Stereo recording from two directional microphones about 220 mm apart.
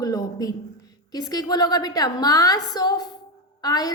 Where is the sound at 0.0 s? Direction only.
15° left (ahead or behind).